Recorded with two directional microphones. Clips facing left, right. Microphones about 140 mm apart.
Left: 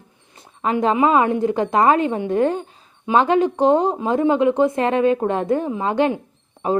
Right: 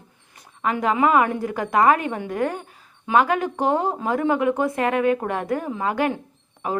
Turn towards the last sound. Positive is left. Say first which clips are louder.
# left 6 dB
turn(degrees=30)  # may be behind; listen again after turning